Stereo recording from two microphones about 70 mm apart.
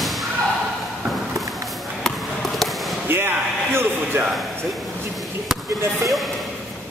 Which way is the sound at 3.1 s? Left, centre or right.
Right.